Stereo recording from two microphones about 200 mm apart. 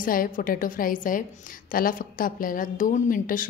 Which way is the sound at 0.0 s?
45° left (ahead or behind).